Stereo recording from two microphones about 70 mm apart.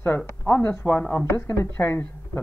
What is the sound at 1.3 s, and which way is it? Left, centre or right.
Speech, left.